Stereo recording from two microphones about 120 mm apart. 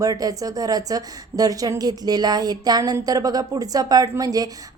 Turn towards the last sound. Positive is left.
turn(degrees=-30)  # may be behind; listen again after turning